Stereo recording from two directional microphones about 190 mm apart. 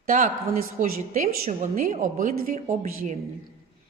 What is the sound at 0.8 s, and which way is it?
A woman's voice, 40° right (ahead or behind).